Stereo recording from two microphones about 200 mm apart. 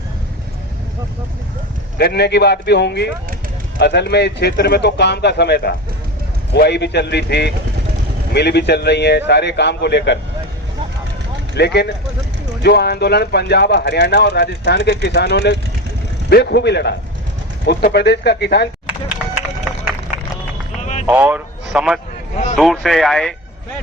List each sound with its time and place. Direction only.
2.0 s speech: 55° left (ahead or behind)
11.5 s speech: 55° left (ahead or behind)
20.8 s a sound: 35° left (ahead or behind)
21.1 s speech: 10° right (ahead or behind)